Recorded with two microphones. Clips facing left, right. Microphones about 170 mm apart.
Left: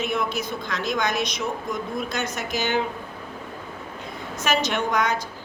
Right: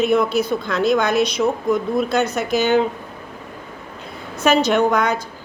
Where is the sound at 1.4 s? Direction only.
60° right (ahead or behind).